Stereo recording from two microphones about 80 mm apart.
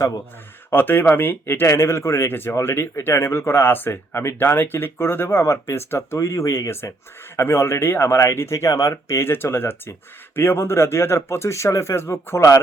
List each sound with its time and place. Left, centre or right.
0.7 s speech: left